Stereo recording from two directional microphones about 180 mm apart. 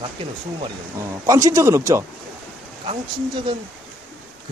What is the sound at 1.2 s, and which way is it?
Speech, 15° right (ahead or behind).